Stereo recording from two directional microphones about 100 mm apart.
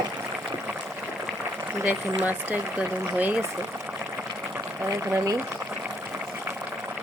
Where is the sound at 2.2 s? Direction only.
15° right (ahead or behind).